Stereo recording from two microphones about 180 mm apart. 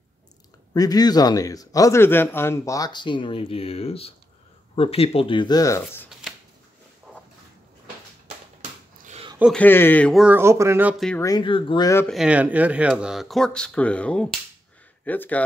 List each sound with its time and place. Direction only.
0.7 s speech: 20° left (ahead or behind)
7.1 s a sound: 5° left (ahead or behind)
9.0 s a sound: 35° right (ahead or behind)
9.4 s speech: 5° left (ahead or behind)
10.2 s speech: 15° right (ahead or behind)
11.1 s speech: 20° left (ahead or behind)
12.1 s speech: 5° right (ahead or behind)